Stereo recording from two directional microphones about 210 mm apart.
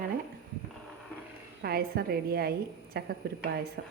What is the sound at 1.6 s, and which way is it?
Speech, 45° right (ahead or behind).